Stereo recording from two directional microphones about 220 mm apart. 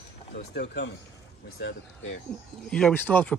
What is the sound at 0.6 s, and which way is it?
Speech, 50° left (ahead or behind).